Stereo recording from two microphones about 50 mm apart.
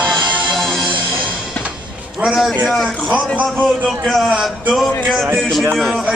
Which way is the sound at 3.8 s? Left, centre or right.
Centre.